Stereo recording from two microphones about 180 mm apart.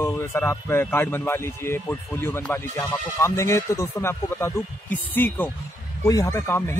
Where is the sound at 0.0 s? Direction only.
15° left (ahead or behind).